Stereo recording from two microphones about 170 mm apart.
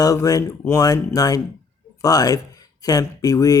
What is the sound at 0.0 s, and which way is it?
Speech, 20° left (ahead or behind).